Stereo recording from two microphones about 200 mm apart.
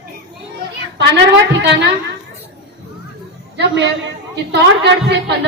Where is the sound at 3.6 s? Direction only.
60° right (ahead or behind).